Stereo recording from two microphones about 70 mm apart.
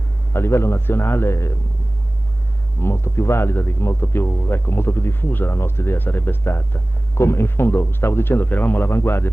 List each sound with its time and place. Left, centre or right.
0.3 s speech: left
2.8 s speech: left